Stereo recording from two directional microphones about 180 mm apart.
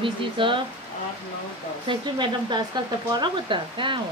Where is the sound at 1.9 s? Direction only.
25° right (ahead or behind).